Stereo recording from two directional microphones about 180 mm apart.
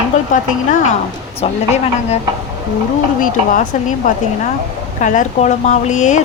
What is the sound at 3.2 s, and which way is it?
Speech, 45° left (ahead or behind).